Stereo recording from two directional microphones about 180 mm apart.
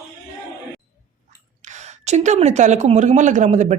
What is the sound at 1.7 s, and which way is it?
A woman's voice, 40° right (ahead or behind).